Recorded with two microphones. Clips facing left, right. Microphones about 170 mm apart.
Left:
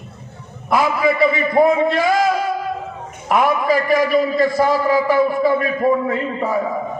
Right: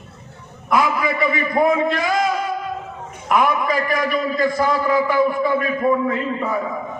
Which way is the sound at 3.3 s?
30° left (ahead or behind).